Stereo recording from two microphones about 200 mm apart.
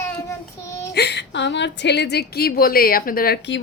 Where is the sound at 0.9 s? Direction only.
55° left (ahead or behind).